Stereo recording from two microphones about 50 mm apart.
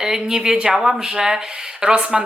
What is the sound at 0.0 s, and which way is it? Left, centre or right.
A woman's voice, centre.